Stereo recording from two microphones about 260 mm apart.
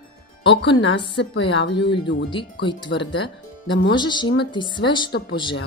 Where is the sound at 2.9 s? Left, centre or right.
Left.